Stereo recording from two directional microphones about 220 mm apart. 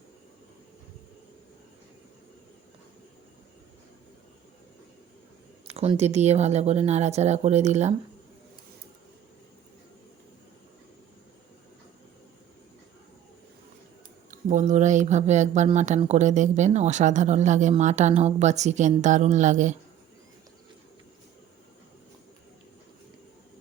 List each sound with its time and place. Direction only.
5.6 s speech: 25° right (ahead or behind)
14.3 s speech: 35° right (ahead or behind)